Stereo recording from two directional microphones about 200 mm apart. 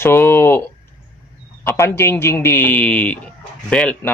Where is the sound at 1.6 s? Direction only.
15° left (ahead or behind).